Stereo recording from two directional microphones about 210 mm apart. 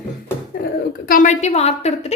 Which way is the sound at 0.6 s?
45° left (ahead or behind).